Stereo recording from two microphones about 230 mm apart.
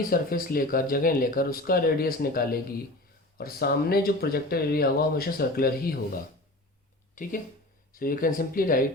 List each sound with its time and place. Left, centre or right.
0.1 s speech: left
7.2 s speech: left